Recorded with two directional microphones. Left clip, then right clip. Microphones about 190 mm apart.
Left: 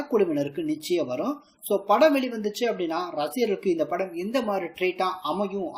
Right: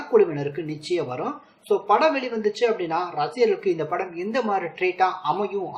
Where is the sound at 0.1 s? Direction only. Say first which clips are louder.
Right 5 dB; 50° left (ahead or behind).